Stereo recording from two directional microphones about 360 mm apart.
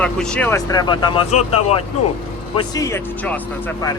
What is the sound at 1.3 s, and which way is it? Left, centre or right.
Speech, centre.